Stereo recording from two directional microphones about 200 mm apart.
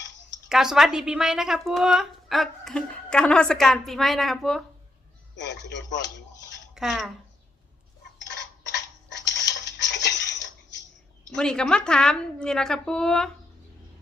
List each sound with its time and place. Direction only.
0.4 s a woman's voice: 5° right (ahead or behind)
5.4 s speech: 60° left (ahead or behind)
6.7 s speech: centre (ahead or behind)
8.2 s a sound: 60° left (ahead or behind)
11.3 s a woman's voice: 5° left (ahead or behind)